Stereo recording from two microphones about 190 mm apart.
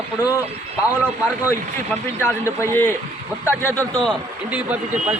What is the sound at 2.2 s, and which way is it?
Speech, 15° left (ahead or behind).